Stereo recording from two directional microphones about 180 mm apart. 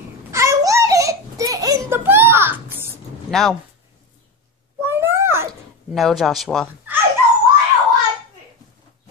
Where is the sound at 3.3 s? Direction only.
Centre (ahead or behind).